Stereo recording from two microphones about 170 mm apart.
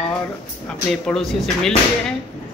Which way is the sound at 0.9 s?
Centre (ahead or behind).